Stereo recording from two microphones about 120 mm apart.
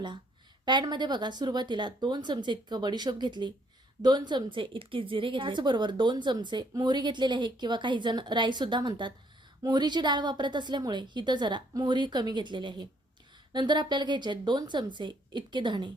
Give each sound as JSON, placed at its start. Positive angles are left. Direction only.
{"t": 0.6, "sound": "a woman's voice", "side_deg": -40}